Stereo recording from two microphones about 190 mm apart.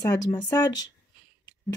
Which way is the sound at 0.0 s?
20° left (ahead or behind).